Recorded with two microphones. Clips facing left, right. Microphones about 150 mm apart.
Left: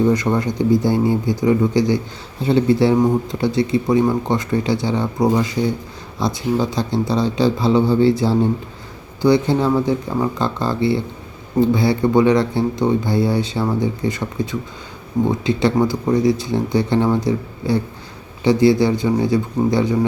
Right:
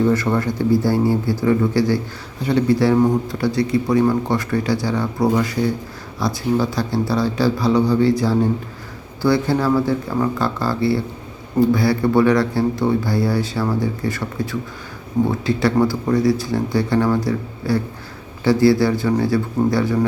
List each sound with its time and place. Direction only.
0.0 s speech: 15° left (ahead or behind)